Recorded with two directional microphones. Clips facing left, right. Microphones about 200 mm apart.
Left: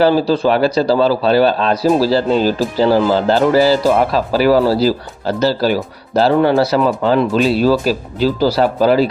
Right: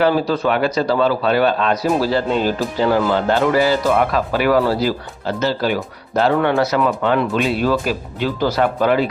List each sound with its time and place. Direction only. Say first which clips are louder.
0.0 s speech: left 4 dB; 30° left (ahead or behind)